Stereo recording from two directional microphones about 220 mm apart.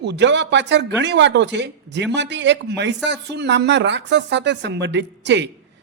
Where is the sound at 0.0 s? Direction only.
50° right (ahead or behind).